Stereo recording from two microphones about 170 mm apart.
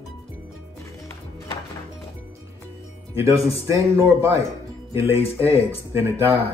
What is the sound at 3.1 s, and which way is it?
Speech, 15° right (ahead or behind).